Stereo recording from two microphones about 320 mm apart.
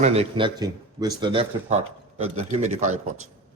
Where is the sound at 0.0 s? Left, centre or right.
Centre.